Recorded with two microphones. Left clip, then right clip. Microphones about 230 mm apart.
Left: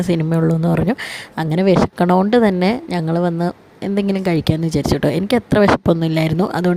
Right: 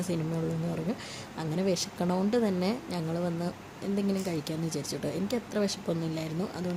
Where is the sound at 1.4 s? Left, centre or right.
Left.